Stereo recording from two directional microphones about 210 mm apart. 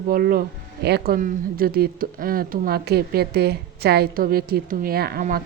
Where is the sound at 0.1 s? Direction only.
45° right (ahead or behind).